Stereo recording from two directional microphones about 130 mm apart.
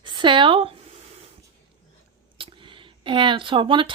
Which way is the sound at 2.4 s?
45° right (ahead or behind).